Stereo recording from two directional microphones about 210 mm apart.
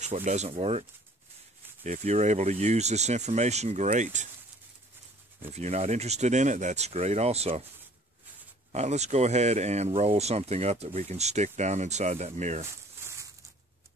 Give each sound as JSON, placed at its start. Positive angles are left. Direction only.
{"t": 0.0, "sound": "speech", "side_deg": -35}
{"t": 5.5, "sound": "speech", "side_deg": -30}
{"t": 8.7, "sound": "speech", "side_deg": -30}